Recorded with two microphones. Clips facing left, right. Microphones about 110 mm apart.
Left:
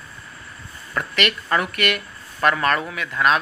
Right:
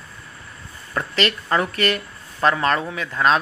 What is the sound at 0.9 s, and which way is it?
Speech, 30° right (ahead or behind).